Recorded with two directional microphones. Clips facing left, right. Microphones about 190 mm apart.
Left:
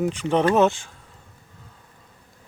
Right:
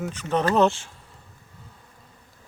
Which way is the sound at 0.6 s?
Centre (ahead or behind).